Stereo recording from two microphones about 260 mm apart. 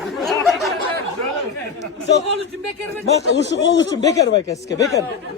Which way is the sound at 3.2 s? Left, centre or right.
Left.